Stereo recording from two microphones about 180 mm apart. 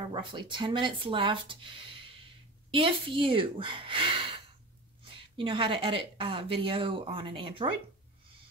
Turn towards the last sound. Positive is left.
turn(degrees=-30)  # may be behind; listen again after turning